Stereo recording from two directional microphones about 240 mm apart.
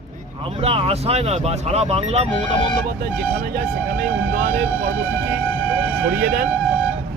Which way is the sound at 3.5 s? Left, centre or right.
Right.